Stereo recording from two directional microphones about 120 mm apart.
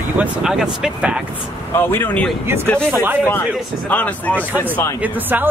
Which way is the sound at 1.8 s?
20° left (ahead or behind).